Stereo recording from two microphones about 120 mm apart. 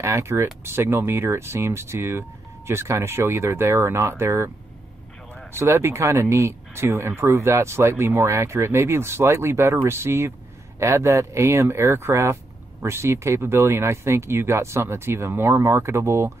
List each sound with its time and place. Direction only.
0.0 s speech: 25° right (ahead or behind)
5.5 s speech: 20° right (ahead or behind)